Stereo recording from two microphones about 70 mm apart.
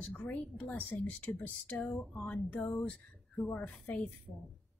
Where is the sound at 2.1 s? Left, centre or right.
Left.